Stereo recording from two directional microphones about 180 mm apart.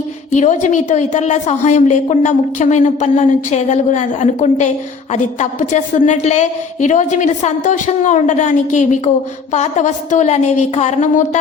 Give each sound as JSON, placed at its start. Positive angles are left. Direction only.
{"t": 0.3, "sound": "a woman's voice", "side_deg": 40}